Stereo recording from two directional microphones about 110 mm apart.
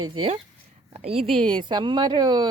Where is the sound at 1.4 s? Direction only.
50° right (ahead or behind).